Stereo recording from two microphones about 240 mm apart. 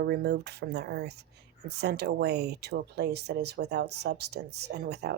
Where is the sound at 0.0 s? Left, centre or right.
Right.